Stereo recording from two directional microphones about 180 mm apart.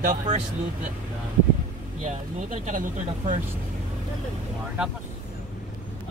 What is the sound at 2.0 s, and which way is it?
Speech, 45° right (ahead or behind).